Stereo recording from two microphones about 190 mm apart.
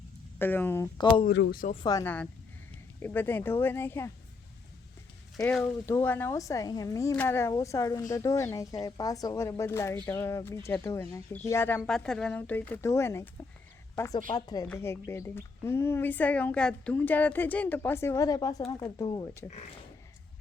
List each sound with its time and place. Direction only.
0.3 s speech: 10° left (ahead or behind)
1.3 s speech: 60° left (ahead or behind)
1.7 s speech: 20° left (ahead or behind)
5.5 s speech: 10° left (ahead or behind)